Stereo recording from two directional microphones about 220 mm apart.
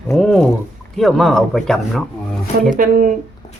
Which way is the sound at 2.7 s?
40° right (ahead or behind).